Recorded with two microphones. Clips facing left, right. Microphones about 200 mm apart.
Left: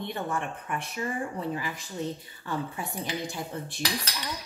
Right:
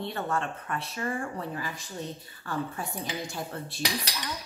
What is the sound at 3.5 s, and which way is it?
Speech, 15° left (ahead or behind).